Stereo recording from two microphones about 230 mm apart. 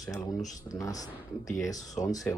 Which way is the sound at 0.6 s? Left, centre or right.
Centre.